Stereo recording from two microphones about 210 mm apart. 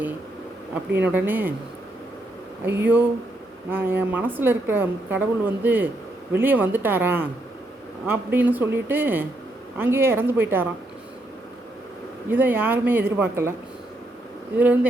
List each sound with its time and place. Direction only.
0.9 s a woman's voice: 10° right (ahead or behind)
2.6 s a woman's voice: 10° right (ahead or behind)
12.3 s a woman's voice: 10° right (ahead or behind)